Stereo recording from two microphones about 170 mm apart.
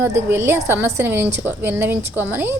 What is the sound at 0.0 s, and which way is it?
A woman's voice, 15° right (ahead or behind).